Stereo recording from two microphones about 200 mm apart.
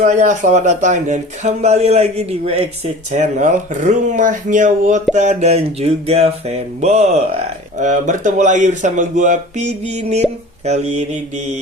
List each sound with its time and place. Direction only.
0.0 s a man's voice: 35° right (ahead or behind)